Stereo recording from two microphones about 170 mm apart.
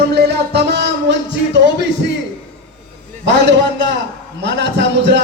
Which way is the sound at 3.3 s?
90° right.